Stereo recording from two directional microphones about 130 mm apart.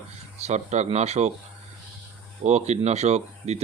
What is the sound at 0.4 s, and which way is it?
Speech, 60° right (ahead or behind).